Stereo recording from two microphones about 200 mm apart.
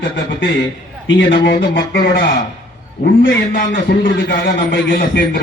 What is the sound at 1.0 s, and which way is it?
Speech, 65° left (ahead or behind).